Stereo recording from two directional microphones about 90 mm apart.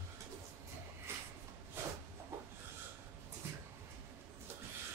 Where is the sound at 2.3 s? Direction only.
30° right (ahead or behind).